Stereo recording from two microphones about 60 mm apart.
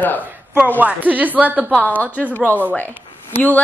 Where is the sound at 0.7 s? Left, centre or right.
Right.